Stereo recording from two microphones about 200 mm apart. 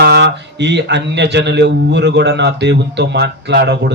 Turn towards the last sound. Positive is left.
turn(degrees=-55)  # may be behind; listen again after turning